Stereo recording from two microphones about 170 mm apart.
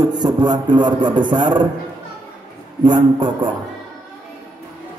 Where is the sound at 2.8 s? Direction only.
25° right (ahead or behind).